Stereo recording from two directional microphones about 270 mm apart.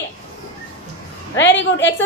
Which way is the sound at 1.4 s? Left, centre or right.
Left.